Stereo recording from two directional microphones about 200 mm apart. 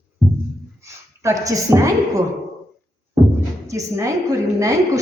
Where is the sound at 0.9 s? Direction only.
15° right (ahead or behind).